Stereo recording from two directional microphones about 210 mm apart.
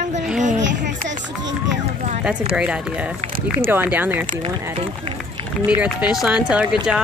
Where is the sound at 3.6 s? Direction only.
10° right (ahead or behind).